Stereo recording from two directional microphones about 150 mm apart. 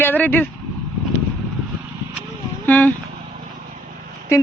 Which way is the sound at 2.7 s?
10° left (ahead or behind).